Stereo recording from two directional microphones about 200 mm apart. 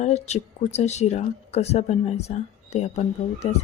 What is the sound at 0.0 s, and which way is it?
Speech, 35° left (ahead or behind).